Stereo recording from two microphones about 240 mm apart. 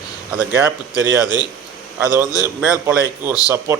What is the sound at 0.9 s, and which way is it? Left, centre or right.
Speech, centre.